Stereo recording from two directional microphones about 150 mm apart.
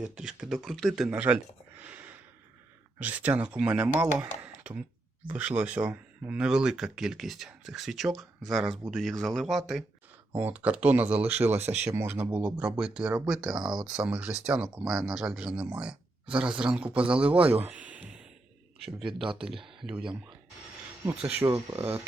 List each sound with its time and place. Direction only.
0.0 s speech: 5° right (ahead or behind)
1.8 s a sound: 10° right (ahead or behind)
3.0 s speech: 10° right (ahead or behind)
13.6 s speech: 30° right (ahead or behind)
13.8 s speech: 5° right (ahead or behind)
17.9 s music: 5° right (ahead or behind)
19.0 s speech: 35° right (ahead or behind)
19.6 s speech: 5° right (ahead or behind)
21.2 s speech: 10° right (ahead or behind)